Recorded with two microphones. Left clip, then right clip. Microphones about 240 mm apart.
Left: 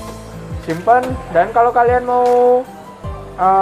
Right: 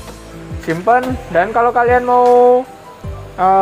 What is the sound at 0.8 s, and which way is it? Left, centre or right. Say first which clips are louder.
Speech: left 1 dB; right.